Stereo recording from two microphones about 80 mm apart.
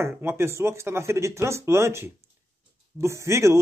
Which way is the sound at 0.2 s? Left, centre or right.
Right.